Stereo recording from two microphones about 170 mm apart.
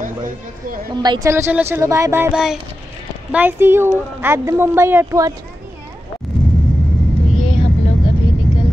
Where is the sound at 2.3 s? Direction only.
5° right (ahead or behind); by 5.4 s 20° right (ahead or behind).